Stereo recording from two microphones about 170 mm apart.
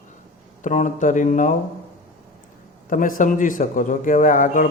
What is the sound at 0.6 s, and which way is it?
Speech, 50° left (ahead or behind).